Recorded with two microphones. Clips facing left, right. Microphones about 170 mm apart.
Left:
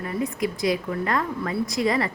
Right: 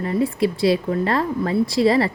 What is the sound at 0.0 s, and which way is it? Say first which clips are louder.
Speech: right 6 dB; 30° right (ahead or behind).